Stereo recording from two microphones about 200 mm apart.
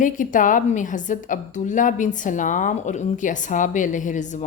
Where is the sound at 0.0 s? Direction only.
40° left (ahead or behind).